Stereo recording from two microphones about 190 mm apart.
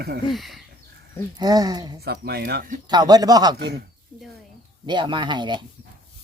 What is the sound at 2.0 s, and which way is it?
Speech, 55° right (ahead or behind).